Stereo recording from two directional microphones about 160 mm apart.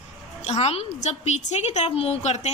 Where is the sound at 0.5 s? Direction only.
40° left (ahead or behind).